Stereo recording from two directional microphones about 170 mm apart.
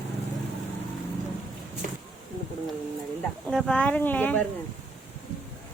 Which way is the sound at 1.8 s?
50° right (ahead or behind).